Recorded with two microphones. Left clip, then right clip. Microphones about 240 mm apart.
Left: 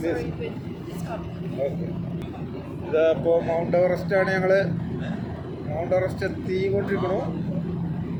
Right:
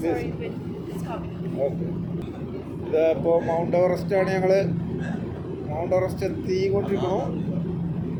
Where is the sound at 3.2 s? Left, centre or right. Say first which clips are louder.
Even; centre.